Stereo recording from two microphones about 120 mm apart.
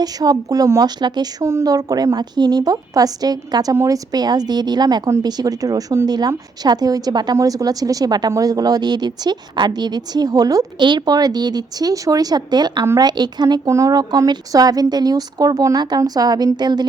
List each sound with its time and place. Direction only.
0.0 s a woman's voice: 30° right (ahead or behind)